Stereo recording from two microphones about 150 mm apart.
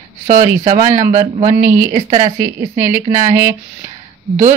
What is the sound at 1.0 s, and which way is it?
Speech, 55° right (ahead or behind).